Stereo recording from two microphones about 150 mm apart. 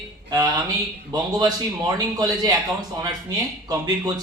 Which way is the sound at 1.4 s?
30° right (ahead or behind).